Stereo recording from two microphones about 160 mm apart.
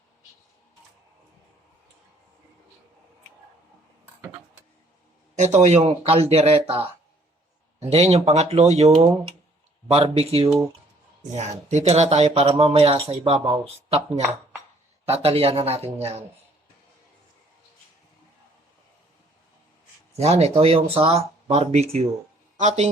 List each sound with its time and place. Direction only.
5.4 s speech: 45° right (ahead or behind)
9.9 s speech: 35° right (ahead or behind)
15.0 s speech: 40° right (ahead or behind)
20.1 s speech: 40° right (ahead or behind)